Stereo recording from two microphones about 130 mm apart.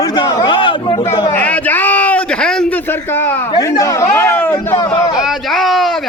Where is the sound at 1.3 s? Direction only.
10° left (ahead or behind).